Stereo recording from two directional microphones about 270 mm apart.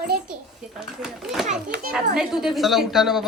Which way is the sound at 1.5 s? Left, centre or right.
Right.